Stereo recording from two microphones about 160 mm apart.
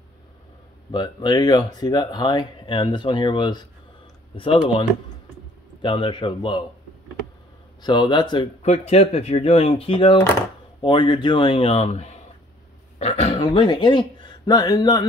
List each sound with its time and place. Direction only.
0.9 s speech: 25° left (ahead or behind)
5.8 s speech: 30° left (ahead or behind)
7.8 s speech: 30° left (ahead or behind)
8.6 s speech: 40° left (ahead or behind); by 15.0 s 25° left (ahead or behind)